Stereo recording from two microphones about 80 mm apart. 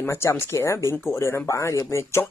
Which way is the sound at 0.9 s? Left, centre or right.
Left.